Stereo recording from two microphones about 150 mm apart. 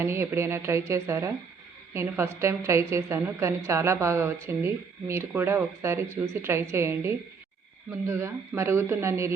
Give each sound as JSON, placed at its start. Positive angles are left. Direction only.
{"t": 0.0, "sound": "a woman's voice", "side_deg": -15}